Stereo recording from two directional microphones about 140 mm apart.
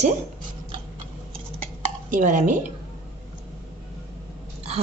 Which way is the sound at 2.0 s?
65° right (ahead or behind).